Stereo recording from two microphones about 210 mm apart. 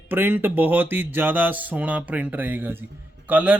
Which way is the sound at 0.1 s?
10° right (ahead or behind).